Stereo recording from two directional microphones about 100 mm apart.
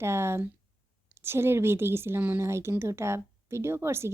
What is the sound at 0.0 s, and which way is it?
A woman's voice, 25° right (ahead or behind).